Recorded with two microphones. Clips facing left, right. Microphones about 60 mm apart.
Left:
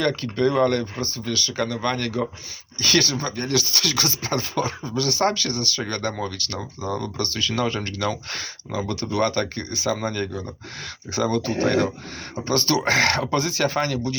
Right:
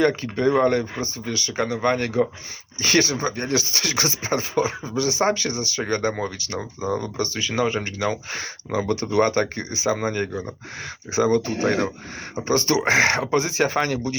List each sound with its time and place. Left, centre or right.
0.0 s speech: right